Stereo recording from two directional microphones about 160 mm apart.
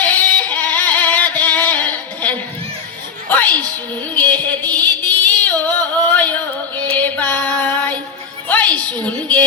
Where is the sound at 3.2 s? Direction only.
10° left (ahead or behind).